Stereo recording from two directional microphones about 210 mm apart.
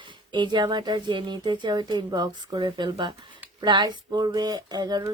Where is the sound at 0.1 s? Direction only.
20° right (ahead or behind).